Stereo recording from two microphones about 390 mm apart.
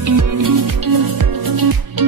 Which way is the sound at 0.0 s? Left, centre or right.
Right.